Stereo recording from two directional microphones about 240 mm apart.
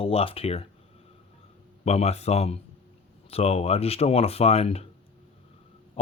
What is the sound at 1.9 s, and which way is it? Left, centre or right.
Speech, left.